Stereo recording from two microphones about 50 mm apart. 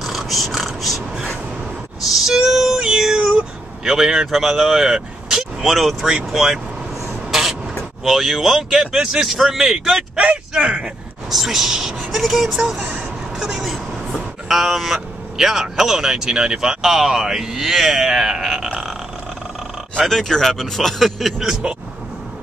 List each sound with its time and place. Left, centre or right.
0.0 s a sound: centre
2.0 s music: centre
3.9 s speech: centre
7.2 s vehicle: centre
8.0 s speech: centre
10.1 s speech: right
11.2 s speech: centre
13.4 s vehicle: centre
14.5 s speech: centre
20.0 s speech: centre